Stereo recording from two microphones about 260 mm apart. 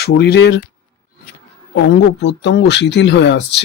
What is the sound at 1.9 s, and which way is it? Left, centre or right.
Speech, left.